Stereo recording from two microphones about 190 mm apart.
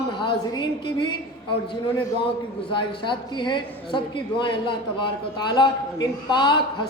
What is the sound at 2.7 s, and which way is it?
A man's voice, 25° left (ahead or behind).